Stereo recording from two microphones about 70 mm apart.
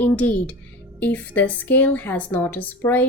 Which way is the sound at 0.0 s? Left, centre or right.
Left.